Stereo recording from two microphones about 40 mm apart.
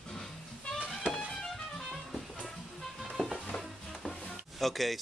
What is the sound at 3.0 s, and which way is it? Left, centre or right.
Music, centre.